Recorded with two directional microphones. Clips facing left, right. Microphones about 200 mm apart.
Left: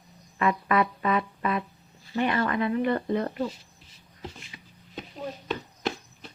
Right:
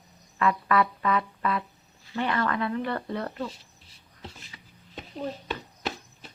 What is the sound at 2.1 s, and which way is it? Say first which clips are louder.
Speech: left 2 dB; 20° left (ahead or behind).